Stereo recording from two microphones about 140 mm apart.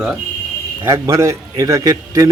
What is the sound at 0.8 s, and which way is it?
A man's voice, 20° right (ahead or behind).